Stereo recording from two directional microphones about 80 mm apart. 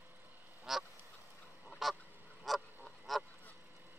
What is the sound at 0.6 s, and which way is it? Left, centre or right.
Goose, centre.